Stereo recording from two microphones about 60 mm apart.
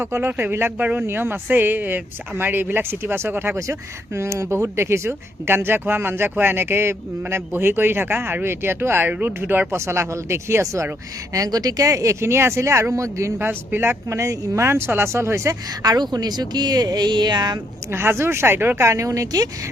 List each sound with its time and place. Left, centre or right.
0.0 s speech: right
3.7 s speech: right
9.7 s speech: right
11.3 s speech: right
12.2 s speech: right
13.4 s speech: right
14.1 s speech: right
15.8 s speech: right
17.9 s speech: right
18.9 s speech: right